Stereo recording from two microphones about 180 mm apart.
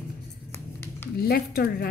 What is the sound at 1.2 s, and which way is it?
Speech, 60° left (ahead or behind).